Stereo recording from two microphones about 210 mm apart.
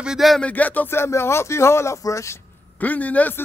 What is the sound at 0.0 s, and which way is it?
Speech, centre (ahead or behind).